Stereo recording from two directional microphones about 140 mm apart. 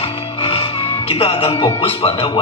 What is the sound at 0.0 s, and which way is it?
Speech, 45° left (ahead or behind).